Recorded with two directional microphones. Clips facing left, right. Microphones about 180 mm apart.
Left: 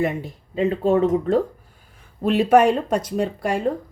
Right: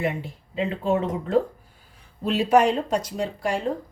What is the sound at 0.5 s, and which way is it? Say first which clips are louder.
Speech: left 5 dB; 40° left (ahead or behind).